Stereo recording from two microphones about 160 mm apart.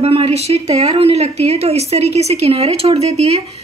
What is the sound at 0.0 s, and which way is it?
Speech, 40° right (ahead or behind).